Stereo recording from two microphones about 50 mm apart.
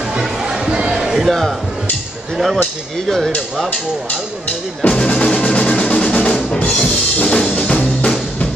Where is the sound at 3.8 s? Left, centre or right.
Centre.